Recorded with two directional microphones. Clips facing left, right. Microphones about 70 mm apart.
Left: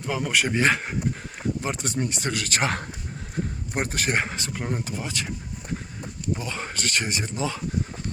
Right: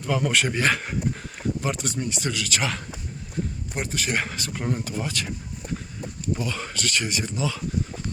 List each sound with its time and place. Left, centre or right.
0.0 s speech: centre
0.5 s speech: left
3.8 s speech: left
4.1 s speech: left
6.4 s speech: left